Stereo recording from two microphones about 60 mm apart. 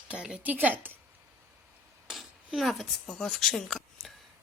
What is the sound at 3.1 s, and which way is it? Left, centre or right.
Speech, centre.